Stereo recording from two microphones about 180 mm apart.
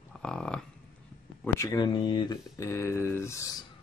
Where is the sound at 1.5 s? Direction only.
20° left (ahead or behind).